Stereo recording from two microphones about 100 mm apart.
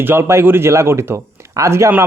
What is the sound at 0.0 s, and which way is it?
Speech, 25° right (ahead or behind).